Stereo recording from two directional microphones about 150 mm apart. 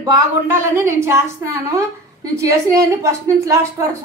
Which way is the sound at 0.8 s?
20° right (ahead or behind).